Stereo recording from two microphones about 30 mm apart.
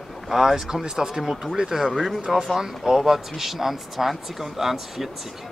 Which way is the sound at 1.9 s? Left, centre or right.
Centre.